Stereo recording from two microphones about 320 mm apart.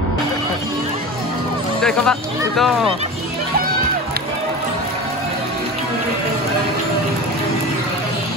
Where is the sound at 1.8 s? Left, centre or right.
Centre.